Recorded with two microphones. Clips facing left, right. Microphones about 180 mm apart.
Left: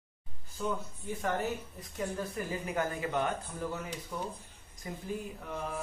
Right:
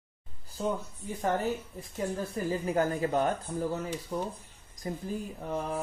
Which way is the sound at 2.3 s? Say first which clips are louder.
Right 5 dB; 35° right (ahead or behind).